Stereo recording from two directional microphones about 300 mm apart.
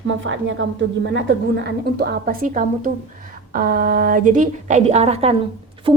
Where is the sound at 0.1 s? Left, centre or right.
Right.